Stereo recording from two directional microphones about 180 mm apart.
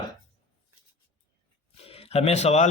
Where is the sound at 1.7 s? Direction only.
35° left (ahead or behind).